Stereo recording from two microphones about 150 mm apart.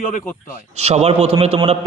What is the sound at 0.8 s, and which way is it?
Speech, 45° right (ahead or behind).